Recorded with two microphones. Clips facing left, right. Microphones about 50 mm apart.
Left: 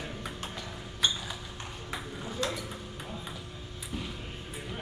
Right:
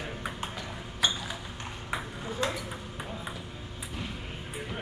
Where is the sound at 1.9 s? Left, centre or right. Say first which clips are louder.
Right 4 dB; right.